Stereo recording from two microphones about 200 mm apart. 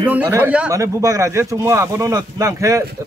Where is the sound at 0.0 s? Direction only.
10° right (ahead or behind).